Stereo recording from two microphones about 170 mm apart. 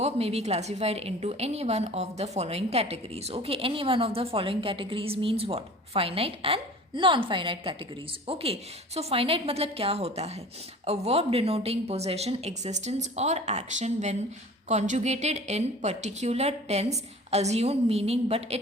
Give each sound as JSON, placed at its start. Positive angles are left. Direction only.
{"t": 0.0, "sound": "a woman's voice", "side_deg": -35}